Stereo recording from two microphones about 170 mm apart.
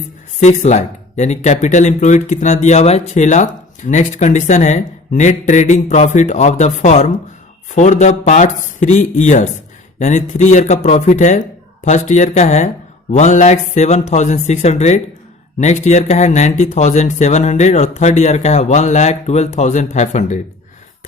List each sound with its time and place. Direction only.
0.3 s speech: 45° left (ahead or behind)